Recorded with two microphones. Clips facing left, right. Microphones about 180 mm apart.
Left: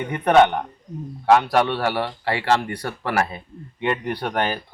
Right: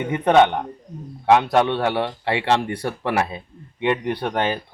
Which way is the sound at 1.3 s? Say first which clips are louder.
Right 1 dB; 15° right (ahead or behind).